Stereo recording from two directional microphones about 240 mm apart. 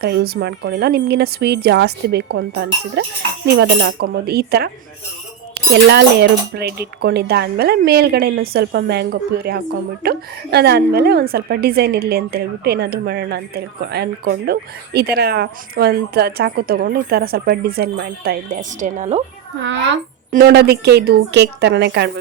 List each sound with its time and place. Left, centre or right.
0.0 s speech: right
20.3 s speech: right